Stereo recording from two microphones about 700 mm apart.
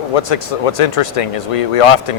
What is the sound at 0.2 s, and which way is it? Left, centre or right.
Speech, left.